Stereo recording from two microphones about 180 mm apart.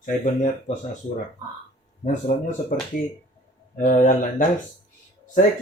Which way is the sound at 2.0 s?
45° left (ahead or behind).